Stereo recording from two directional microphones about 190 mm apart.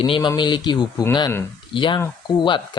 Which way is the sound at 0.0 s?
25° left (ahead or behind).